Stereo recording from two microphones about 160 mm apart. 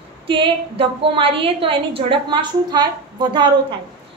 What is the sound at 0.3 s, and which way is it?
A woman's voice, 35° right (ahead or behind).